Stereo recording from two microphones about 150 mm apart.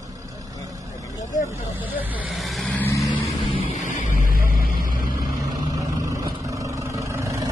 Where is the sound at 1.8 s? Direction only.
10° right (ahead or behind).